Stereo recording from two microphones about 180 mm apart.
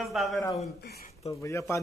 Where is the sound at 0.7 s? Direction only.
60° left (ahead or behind).